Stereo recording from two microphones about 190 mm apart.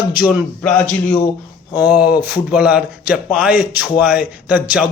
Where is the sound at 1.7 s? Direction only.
10° right (ahead or behind).